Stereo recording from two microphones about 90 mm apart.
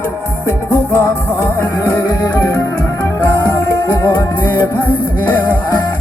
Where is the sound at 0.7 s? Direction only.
15° left (ahead or behind).